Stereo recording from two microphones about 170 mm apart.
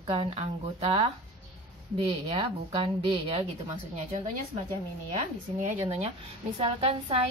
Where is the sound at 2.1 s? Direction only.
35° right (ahead or behind).